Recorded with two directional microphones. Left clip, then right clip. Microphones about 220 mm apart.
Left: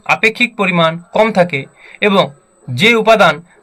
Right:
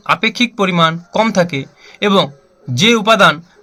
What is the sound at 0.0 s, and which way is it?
A man's voice, 25° right (ahead or behind).